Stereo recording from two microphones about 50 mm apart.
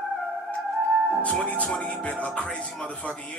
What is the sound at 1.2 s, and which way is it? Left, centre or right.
Music, left.